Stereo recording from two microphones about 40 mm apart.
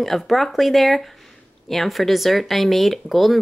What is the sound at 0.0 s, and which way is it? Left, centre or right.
Speech, centre.